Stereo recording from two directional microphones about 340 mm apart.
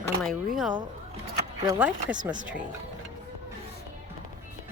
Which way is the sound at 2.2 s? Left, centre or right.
Right.